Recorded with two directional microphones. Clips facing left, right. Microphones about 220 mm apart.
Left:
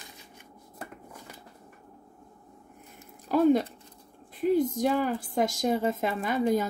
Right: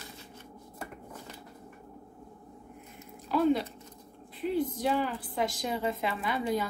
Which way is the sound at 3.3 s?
45° left (ahead or behind).